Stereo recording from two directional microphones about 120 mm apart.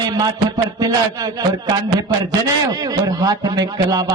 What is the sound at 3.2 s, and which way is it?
Speech, 30° right (ahead or behind).